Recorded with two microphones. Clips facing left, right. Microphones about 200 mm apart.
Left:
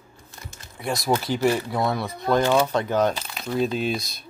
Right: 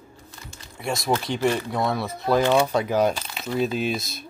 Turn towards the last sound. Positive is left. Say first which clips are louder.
# even
turn(degrees=0)  # may be behind; listen again after turning